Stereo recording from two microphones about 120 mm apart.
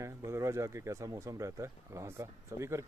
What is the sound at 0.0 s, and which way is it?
Speech, 25° right (ahead or behind).